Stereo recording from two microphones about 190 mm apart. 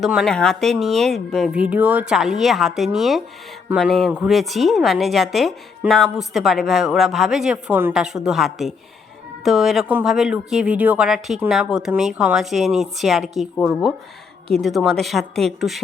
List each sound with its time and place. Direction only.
0.0 s a woman's voice: centre (ahead or behind)